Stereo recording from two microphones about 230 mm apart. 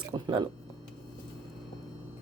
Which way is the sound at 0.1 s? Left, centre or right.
Right.